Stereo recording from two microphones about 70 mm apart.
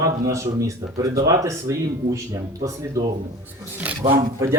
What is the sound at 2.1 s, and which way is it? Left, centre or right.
Speech, right.